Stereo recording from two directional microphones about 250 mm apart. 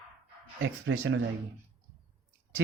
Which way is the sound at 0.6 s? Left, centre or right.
Right.